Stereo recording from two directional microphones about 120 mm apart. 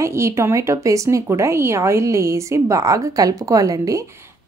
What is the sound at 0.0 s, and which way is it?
Speech, 25° right (ahead or behind).